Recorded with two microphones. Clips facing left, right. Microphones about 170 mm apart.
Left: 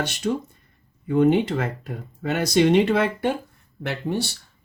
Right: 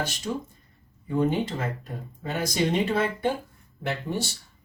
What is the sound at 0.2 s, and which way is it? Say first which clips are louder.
Speech: left 6 dB; 75° left (ahead or behind).